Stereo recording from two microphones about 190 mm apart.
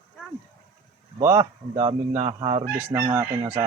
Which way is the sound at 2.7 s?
15° right (ahead or behind).